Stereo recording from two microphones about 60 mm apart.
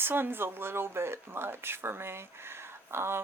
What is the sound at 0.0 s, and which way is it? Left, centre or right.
Speech, right.